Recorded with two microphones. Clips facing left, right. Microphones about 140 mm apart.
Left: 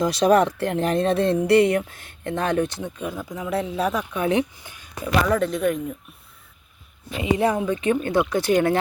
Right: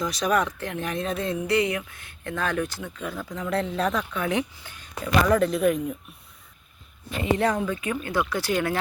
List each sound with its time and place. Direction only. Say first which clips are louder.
0.0 s speech: left 7 dB; 35° left (ahead or behind); by 4.2 s 10° left (ahead or behind)
4.2 s speech: left 8 dB; 25° left (ahead or behind)
5.3 s speech: right 1 dB; centre (ahead or behind)
7.2 s speech: left 2 dB; 15° left (ahead or behind)